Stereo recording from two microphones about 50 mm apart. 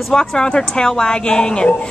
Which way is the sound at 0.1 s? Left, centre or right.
Centre.